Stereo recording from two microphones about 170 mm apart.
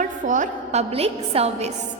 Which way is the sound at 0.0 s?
45° right (ahead or behind).